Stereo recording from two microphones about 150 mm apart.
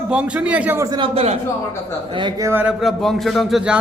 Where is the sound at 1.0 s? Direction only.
40° right (ahead or behind).